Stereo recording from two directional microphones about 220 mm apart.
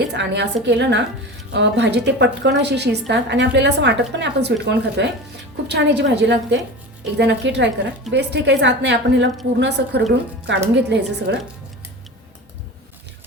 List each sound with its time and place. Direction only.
0.0 s a woman's voice: 50° right (ahead or behind)